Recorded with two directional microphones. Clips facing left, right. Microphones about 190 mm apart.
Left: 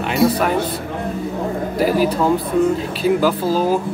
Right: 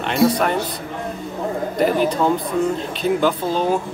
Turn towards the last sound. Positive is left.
turn(degrees=5)  # may be behind; listen again after turning